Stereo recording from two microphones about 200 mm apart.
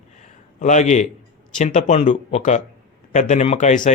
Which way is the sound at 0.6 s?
35° left (ahead or behind).